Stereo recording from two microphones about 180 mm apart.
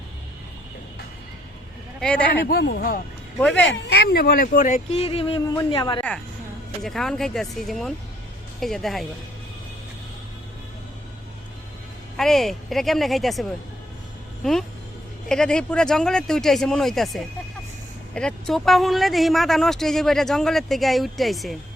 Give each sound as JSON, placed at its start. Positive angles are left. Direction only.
{"t": 2.0, "sound": "speech", "side_deg": 5}
{"t": 2.5, "sound": "speech", "side_deg": 60}
{"t": 3.3, "sound": "speech", "side_deg": 5}
{"t": 3.7, "sound": "speech", "side_deg": 70}
{"t": 6.8, "sound": "speech", "side_deg": 0}
{"t": 12.1, "sound": "speech", "side_deg": 0}
{"t": 15.3, "sound": "speech", "side_deg": 5}